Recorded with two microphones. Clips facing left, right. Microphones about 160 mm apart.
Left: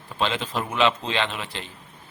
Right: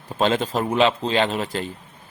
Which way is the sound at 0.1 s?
45° right (ahead or behind).